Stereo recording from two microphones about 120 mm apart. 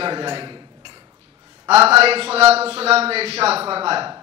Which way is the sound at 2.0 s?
55° right (ahead or behind).